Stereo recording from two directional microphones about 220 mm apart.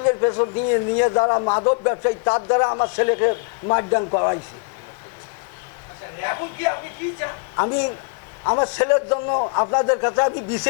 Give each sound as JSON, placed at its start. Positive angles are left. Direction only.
{"t": 0.0, "sound": "a man's voice", "side_deg": 25}
{"t": 6.2, "sound": "a man's voice", "side_deg": 20}